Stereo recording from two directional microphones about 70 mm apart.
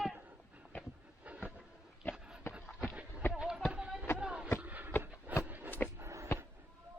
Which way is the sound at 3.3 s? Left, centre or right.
Centre.